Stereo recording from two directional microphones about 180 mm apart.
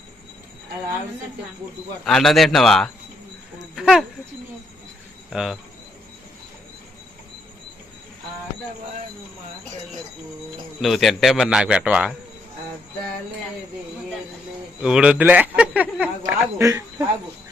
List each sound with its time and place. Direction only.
2.0 s speech: centre (ahead or behind)
3.8 s a sound: centre (ahead or behind)
5.3 s speech: 5° right (ahead or behind)
10.8 s speech: centre (ahead or behind)
14.8 s a man's voice: 5° right (ahead or behind)